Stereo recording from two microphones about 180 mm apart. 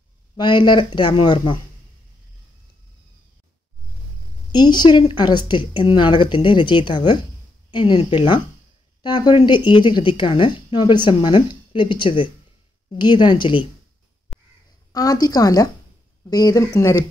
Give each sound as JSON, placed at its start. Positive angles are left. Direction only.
{"t": 0.4, "sound": "a woman's voice", "side_deg": 25}
{"t": 4.5, "sound": "a woman's voice", "side_deg": 25}
{"t": 14.3, "sound": "crow", "side_deg": 0}
{"t": 14.9, "sound": "a woman's voice", "side_deg": 20}